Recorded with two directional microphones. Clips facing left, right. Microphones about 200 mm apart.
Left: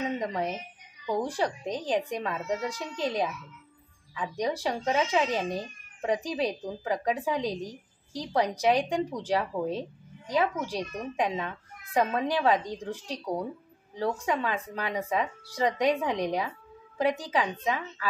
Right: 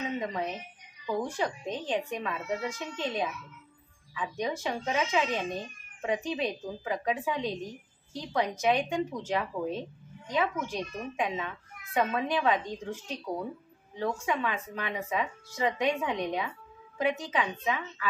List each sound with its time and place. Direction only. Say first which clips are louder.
0.2 s a child's voice: left 2 dB; 35° left (ahead or behind)